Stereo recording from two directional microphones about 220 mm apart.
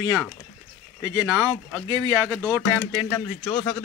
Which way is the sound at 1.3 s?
5° left (ahead or behind).